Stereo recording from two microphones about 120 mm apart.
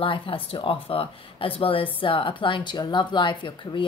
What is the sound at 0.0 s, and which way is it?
A woman's voice, 50° left (ahead or behind).